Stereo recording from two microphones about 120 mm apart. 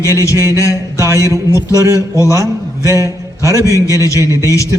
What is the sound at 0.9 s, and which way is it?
Speech, 25° right (ahead or behind).